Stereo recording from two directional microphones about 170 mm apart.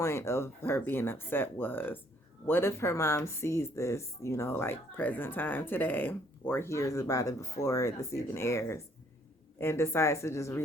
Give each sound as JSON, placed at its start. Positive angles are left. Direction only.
{"t": 0.0, "sound": "speech", "side_deg": 15}